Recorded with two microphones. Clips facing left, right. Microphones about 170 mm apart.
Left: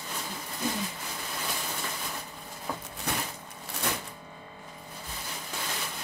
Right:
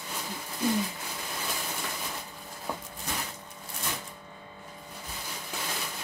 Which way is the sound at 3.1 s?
65° left (ahead or behind).